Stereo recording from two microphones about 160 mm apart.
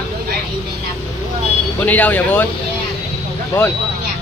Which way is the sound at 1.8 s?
10° left (ahead or behind).